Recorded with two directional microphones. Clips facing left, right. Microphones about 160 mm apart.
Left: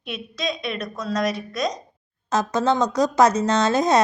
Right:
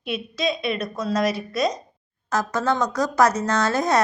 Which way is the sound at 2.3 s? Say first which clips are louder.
Left 2 dB; 20° left (ahead or behind).